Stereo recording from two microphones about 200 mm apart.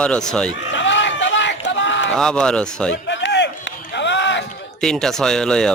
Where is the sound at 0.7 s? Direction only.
65° left (ahead or behind).